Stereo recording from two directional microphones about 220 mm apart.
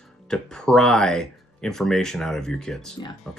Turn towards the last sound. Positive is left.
turn(degrees=0)  # may be behind; listen again after turning